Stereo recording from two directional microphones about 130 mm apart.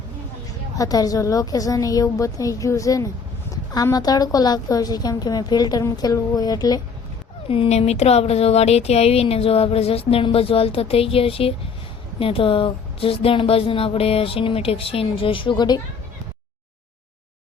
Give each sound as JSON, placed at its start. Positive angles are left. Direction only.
{"t": 0.8, "sound": "a woman's voice", "side_deg": 30}
{"t": 7.4, "sound": "speech", "side_deg": 45}